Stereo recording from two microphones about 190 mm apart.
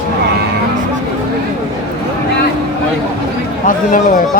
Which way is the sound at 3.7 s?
45° left (ahead or behind).